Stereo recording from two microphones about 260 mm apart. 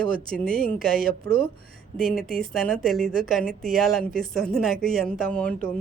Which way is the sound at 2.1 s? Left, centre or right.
Centre.